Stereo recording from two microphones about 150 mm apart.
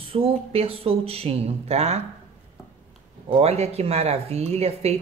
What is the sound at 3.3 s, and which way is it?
Speech, 40° right (ahead or behind).